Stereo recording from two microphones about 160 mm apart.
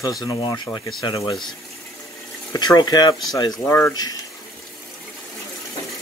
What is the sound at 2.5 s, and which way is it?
Speech, 25° left (ahead or behind).